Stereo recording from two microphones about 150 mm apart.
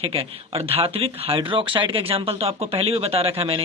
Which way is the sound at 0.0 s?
40° right (ahead or behind).